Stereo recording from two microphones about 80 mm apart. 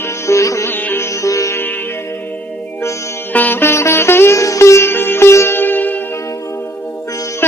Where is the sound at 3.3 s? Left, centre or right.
Left.